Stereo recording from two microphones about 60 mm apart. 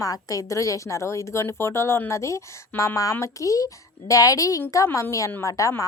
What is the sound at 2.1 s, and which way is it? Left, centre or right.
A woman's voice, left.